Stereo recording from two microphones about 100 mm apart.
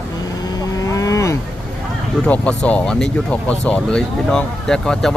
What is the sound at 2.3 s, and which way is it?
Speech, 10° left (ahead or behind).